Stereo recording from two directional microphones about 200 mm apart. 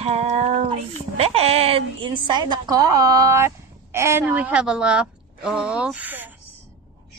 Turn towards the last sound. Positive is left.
turn(degrees=-10)  # may be behind; listen again after turning